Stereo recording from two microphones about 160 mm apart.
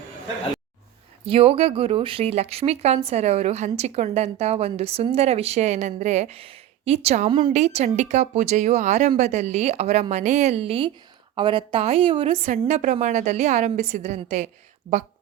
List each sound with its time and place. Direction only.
1.2 s speech: 35° right (ahead or behind)
7.5 s a woman's voice: 45° right (ahead or behind)